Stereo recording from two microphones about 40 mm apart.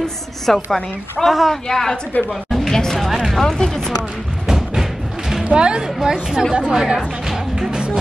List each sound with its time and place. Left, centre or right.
0.0 s a woman's voice: centre
1.7 s a woman's voice: centre
2.5 s a sound: centre
3.3 s music: centre
3.5 s a woman's voice: centre
4.5 s music: centre
5.4 s speech: right
7.7 s music: right